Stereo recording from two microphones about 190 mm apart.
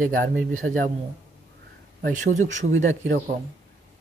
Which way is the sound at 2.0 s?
40° right (ahead or behind).